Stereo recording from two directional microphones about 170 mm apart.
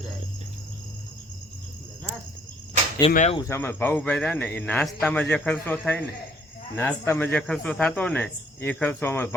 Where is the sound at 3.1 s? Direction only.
40° left (ahead or behind).